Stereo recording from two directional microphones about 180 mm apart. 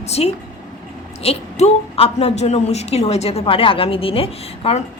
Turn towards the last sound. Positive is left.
turn(degrees=35)  # may be behind; listen again after turning